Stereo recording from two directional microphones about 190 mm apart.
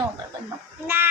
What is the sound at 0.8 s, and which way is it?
Speech, 10° right (ahead or behind).